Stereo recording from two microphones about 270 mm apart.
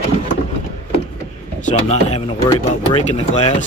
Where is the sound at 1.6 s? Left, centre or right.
Left.